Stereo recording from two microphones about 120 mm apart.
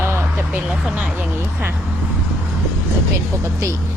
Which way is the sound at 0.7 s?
5° right (ahead or behind).